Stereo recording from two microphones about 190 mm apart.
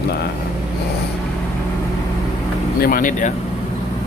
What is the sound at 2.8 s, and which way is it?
Speech, 45° left (ahead or behind).